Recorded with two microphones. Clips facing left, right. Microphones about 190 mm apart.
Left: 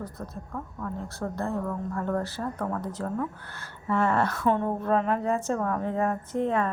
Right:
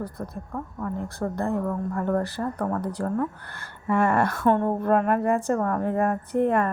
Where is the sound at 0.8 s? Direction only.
15° right (ahead or behind).